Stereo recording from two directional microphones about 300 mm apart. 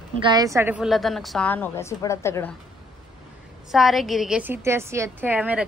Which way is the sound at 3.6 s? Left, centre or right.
Centre.